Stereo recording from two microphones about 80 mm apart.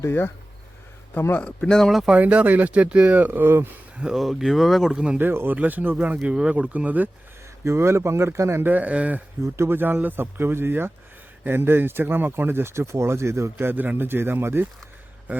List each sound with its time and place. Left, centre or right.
0.0 s speech: left
1.4 s speech: centre
2.1 s speech: centre
3.9 s speech: centre
5.0 s speech: centre
5.3 s speech: right
7.6 s speech: right
8.7 s speech: centre
9.4 s speech: right